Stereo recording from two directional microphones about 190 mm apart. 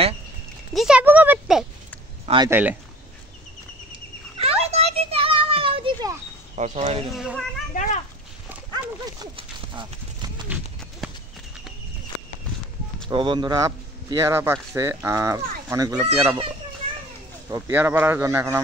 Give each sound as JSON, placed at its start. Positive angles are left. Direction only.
{"t": 0.7, "sound": "speech", "side_deg": -5}
{"t": 2.2, "sound": "speech", "side_deg": -25}
{"t": 2.5, "sound": "speech", "side_deg": -10}
{"t": 3.9, "sound": "a sound", "side_deg": -30}
{"t": 6.5, "sound": "speech", "side_deg": -35}
{"t": 7.2, "sound": "a child's voice", "side_deg": 0}
{"t": 7.7, "sound": "a child's voice", "side_deg": 40}
{"t": 9.2, "sound": "horse", "side_deg": -25}
{"t": 13.1, "sound": "speech", "side_deg": -25}
{"t": 17.5, "sound": "speech", "side_deg": -15}